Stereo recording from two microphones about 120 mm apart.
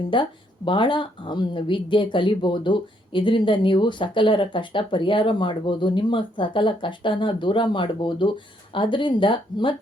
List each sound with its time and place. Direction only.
0.1 s speech: 45° left (ahead or behind)